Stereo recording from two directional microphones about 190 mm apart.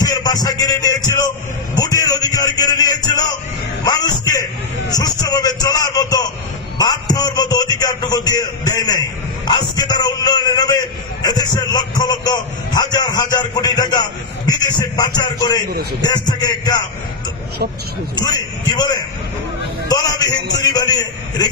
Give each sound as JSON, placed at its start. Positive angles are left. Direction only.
{"t": 0.0, "sound": "a man's voice", "side_deg": 20}
{"t": 18.1, "sound": "a man's voice", "side_deg": 20}